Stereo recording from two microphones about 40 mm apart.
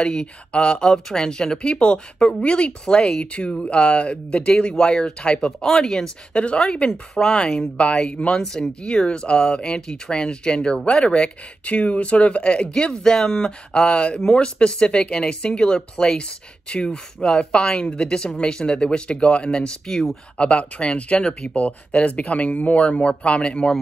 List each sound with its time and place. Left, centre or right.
0.0 s speech: left
6.9 s speech: centre